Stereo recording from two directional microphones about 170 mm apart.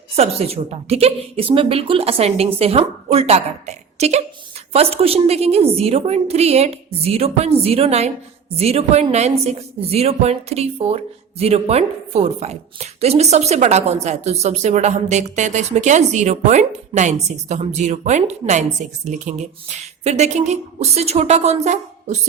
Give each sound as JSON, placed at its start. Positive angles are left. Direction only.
{"t": 0.2, "sound": "a woman's voice", "side_deg": -35}